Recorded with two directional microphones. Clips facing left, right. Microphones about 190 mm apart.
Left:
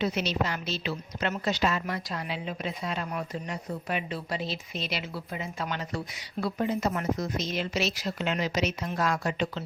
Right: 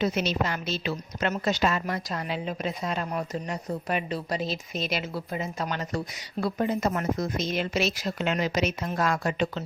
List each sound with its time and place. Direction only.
0.0 s a woman's voice: 45° right (ahead or behind)